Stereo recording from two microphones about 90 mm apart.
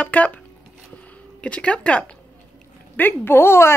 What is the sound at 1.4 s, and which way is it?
Speech, 15° left (ahead or behind).